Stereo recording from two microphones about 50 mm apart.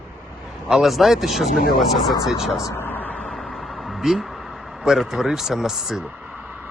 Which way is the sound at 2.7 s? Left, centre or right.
Left.